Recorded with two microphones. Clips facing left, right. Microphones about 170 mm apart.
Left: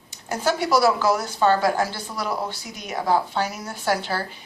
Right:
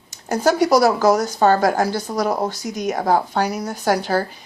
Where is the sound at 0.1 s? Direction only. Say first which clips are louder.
Right 6 dB; 40° right (ahead or behind).